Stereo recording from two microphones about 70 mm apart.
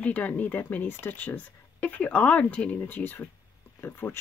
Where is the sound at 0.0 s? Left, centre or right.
Left.